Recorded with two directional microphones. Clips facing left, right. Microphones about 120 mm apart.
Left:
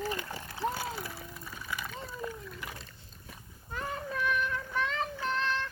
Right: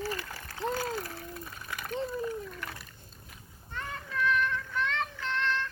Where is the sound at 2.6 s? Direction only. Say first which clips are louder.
Right 1 dB; 20° left (ahead or behind).